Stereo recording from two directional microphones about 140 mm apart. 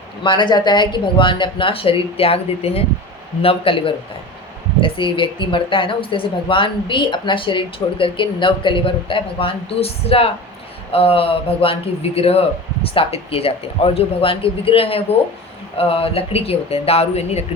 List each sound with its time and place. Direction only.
0.2 s a woman's voice: 35° left (ahead or behind)